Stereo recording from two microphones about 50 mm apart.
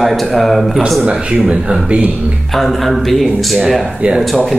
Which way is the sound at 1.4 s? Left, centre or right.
Centre.